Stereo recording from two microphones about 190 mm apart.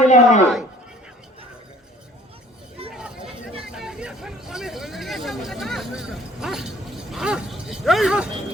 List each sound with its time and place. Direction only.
0.0 s speech: 40° left (ahead or behind)
3.7 s vehicle: 5° right (ahead or behind)
7.1 s a sound: 5° right (ahead or behind)